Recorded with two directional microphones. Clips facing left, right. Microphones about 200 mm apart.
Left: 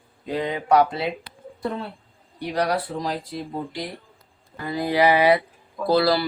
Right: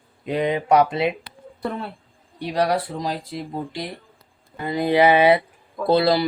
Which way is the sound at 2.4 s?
25° right (ahead or behind).